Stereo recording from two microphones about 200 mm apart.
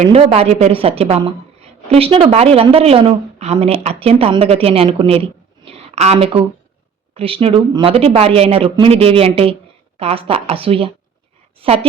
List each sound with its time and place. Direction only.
0.0 s a woman's voice: 30° right (ahead or behind)